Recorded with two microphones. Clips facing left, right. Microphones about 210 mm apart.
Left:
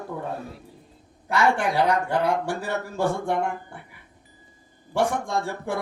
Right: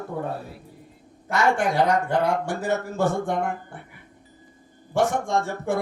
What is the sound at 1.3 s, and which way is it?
Speech, 45° right (ahead or behind).